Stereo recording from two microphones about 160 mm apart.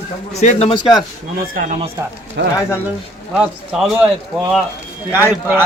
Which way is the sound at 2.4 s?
90° right.